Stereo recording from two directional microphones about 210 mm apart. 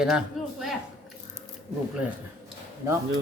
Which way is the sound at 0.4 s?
Centre (ahead or behind).